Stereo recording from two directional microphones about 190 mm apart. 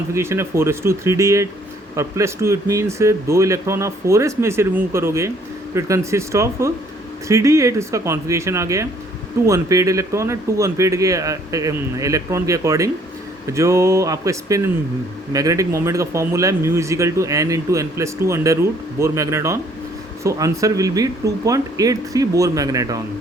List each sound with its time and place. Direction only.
0.1 s speech: 15° right (ahead or behind)